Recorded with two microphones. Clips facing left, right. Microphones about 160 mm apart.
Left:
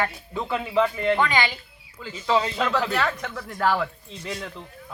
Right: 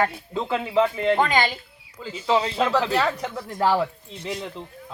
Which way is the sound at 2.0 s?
30° right (ahead or behind).